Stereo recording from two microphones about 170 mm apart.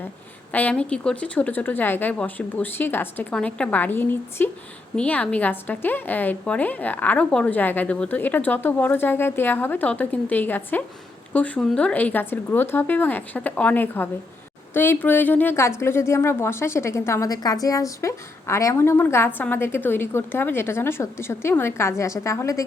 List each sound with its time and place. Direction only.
0.5 s a woman's voice: 10° left (ahead or behind)